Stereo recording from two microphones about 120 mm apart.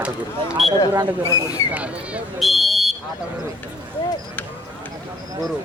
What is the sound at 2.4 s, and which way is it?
Whistle, centre (ahead or behind).